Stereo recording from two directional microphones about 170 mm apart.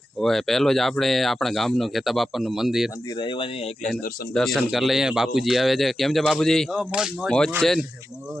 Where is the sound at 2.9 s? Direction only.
20° left (ahead or behind).